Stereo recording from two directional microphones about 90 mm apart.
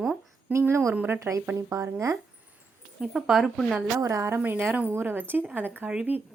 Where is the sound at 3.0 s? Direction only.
Centre (ahead or behind).